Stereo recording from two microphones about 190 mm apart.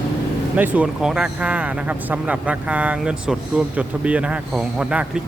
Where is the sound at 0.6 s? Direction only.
10° right (ahead or behind).